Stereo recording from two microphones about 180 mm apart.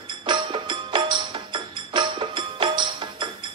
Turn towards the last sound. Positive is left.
turn(degrees=-25)  # may be behind; listen again after turning